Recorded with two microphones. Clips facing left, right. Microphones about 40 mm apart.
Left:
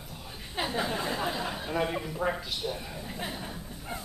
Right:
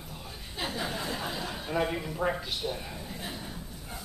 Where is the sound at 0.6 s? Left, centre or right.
Left.